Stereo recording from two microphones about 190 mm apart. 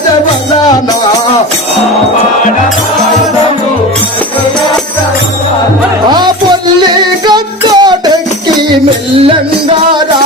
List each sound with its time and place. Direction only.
6.1 s music: 25° right (ahead or behind)